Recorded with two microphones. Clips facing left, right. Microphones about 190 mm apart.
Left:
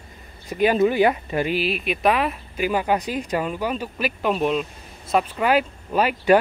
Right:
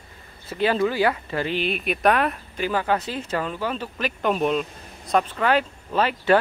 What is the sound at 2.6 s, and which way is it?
Speech, 15° left (ahead or behind).